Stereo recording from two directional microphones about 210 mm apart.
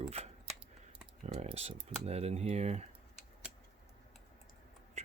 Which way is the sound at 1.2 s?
30° right (ahead or behind).